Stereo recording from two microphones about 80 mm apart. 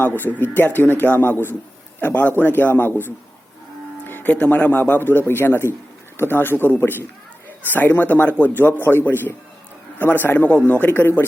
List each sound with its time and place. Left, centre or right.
0.2 s speech: left